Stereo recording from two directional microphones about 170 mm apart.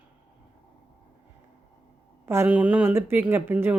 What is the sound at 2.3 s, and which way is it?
Speech, 10° right (ahead or behind).